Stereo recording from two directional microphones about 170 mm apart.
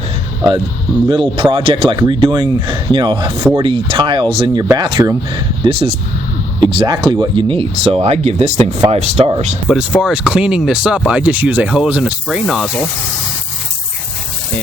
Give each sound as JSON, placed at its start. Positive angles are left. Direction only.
{"t": 1.0, "sound": "speech", "side_deg": -30}
{"t": 3.3, "sound": "speech", "side_deg": -15}
{"t": 3.6, "sound": "speech", "side_deg": -30}
{"t": 10.0, "sound": "speech", "side_deg": -5}